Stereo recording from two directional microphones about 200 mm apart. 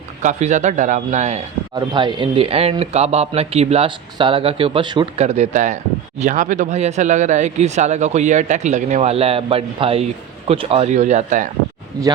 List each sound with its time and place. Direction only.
0.2 s speech: 35° right (ahead or behind)
1.9 s speech: 25° right (ahead or behind); by 11.5 s 40° right (ahead or behind)